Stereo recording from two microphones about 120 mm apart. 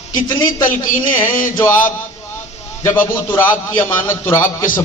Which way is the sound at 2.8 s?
20° left (ahead or behind).